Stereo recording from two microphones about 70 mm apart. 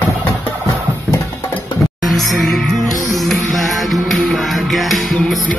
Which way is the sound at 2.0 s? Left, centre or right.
Centre.